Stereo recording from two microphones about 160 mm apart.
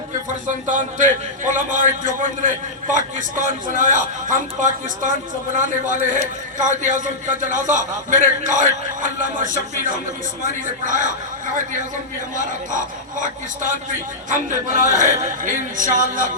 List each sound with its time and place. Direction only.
0.4 s a man's voice: 50° right (ahead or behind)
2.9 s a man's voice: 55° right (ahead or behind)
12.4 s a man's voice: 55° right (ahead or behind)